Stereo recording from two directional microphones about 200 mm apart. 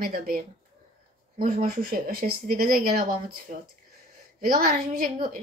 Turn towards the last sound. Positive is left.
turn(degrees=-45)  # may be behind; listen again after turning